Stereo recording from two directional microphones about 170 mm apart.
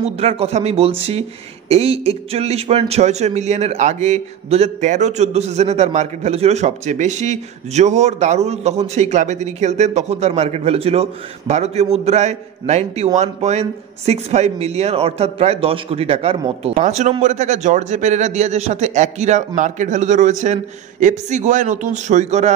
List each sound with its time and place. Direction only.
0.0 s a man's voice: 35° right (ahead or behind)